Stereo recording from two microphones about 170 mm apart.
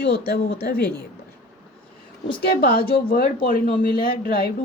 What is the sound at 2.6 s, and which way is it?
Speech, 65° left (ahead or behind).